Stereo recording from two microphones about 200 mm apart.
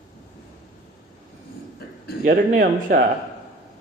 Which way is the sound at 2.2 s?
40° right (ahead or behind).